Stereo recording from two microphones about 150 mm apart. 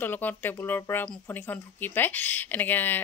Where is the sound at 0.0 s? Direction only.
15° left (ahead or behind).